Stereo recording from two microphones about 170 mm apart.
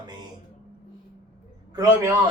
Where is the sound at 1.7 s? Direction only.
15° right (ahead or behind).